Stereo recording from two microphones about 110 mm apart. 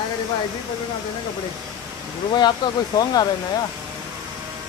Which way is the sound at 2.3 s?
40° left (ahead or behind).